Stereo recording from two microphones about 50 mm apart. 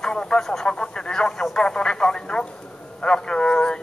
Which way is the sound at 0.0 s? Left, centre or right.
Centre.